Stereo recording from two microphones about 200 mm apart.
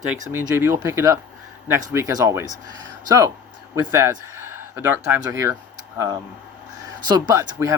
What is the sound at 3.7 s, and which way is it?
Speech, 15° right (ahead or behind).